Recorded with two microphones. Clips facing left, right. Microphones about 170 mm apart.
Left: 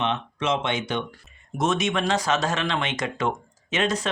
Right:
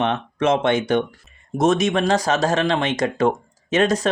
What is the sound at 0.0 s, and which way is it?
Speech, 50° right (ahead or behind).